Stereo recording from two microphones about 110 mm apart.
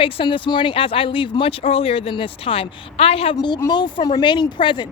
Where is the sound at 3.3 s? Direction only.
40° left (ahead or behind).